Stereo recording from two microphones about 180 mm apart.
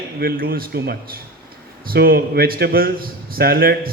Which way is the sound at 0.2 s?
55° right (ahead or behind).